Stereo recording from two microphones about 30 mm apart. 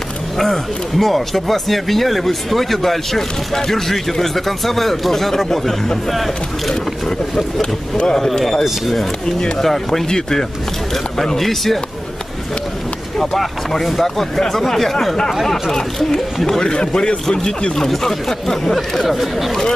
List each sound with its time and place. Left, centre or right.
0.4 s speech: centre
9.6 s speech: centre
10.0 s speech: left
11.3 s speech: centre
13.2 s speech: centre
15.7 s speech: centre
17.7 s speech: centre
19.0 s speech: centre